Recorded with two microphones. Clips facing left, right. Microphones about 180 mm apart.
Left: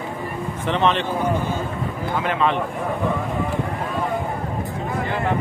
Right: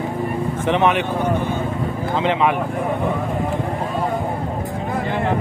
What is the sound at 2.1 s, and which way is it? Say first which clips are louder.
Speech: right 3 dB; 20° right (ahead or behind).